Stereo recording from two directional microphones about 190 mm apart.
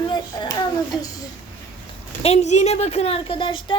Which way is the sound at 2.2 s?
35° left (ahead or behind).